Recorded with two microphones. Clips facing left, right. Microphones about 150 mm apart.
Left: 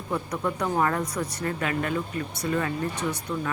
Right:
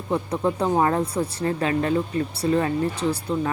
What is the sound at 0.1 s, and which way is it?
A woman's voice, 30° right (ahead or behind).